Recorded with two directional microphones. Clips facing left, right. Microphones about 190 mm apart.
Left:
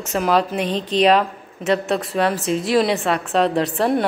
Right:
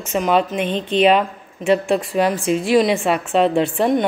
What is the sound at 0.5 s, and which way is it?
Speech, 35° left (ahead or behind).